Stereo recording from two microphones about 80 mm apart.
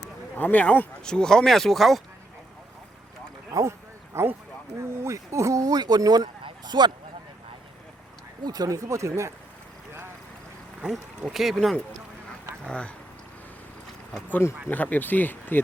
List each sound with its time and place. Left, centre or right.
0.3 s speech: left; by 2.0 s centre
3.5 s a sound: right
4.8 s speech: right
6.4 s a sound: right
8.4 s speech: right
10.8 s speech: centre
12.6 s speech: centre
14.7 s speech: left